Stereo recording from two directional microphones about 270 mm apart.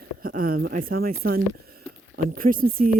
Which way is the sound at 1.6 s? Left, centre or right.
Right.